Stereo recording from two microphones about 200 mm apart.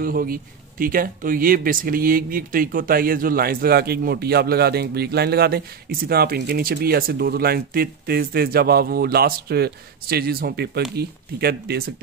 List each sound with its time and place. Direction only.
0.0 s speech: 45° right (ahead or behind)